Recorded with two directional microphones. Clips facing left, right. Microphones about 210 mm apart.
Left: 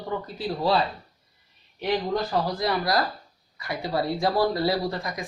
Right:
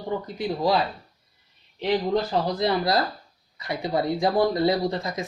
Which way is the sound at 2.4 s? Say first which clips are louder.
Right 3 dB; 25° right (ahead or behind).